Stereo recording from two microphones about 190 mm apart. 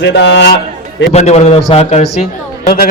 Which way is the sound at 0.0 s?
65° left (ahead or behind).